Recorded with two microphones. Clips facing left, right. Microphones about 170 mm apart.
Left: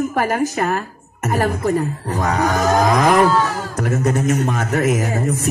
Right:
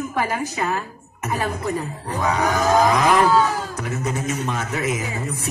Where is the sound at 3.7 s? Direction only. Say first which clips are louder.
Left 7 dB; 50° left (ahead or behind).